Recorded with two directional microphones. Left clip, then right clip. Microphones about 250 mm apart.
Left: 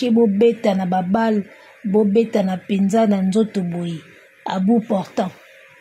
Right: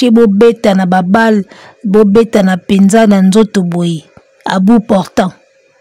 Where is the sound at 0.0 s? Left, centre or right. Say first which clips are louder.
Right 9 dB; right.